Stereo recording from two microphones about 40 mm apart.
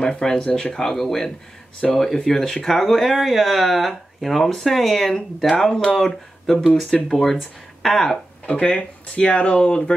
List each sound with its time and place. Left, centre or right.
0.0 s speech: centre
8.6 s speech: left